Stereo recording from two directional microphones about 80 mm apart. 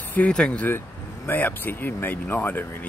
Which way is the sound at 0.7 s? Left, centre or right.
Left.